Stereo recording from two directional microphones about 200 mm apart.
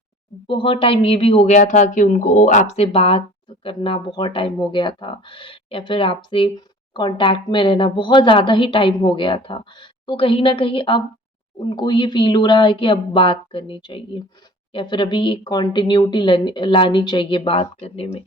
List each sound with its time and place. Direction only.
0.4 s speech: 25° left (ahead or behind)